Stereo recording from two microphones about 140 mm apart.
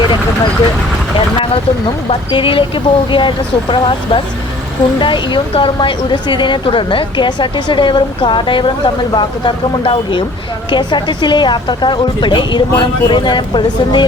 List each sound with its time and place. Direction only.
2.0 s speech: 40° left (ahead or behind)